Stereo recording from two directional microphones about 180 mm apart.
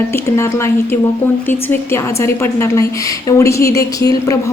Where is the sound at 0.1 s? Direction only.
15° left (ahead or behind).